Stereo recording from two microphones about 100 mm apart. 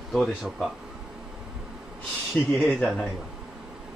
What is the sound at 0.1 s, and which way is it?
Speech, centre (ahead or behind).